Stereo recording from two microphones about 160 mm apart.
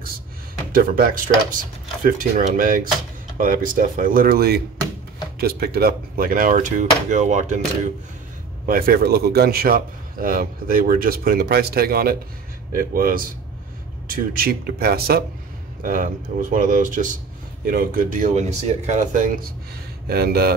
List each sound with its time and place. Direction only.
0.7 s speech: 60° right (ahead or behind)
8.6 s a man's voice: 65° right (ahead or behind)
15.8 s speech: 60° right (ahead or behind)
20.1 s a man's voice: 75° right (ahead or behind)